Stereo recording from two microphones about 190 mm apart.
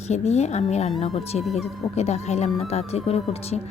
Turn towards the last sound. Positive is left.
turn(degrees=35)  # may be behind; listen again after turning